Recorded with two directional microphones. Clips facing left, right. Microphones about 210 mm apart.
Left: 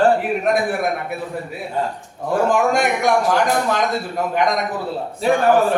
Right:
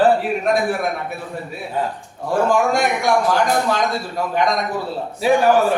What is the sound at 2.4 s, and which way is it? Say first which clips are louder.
Speech: even; 20° left (ahead or behind).